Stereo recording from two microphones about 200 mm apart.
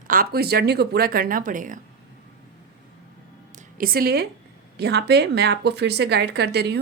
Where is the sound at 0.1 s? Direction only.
50° right (ahead or behind).